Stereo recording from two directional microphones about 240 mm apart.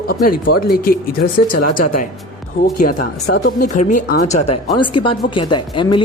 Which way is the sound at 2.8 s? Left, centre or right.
Left.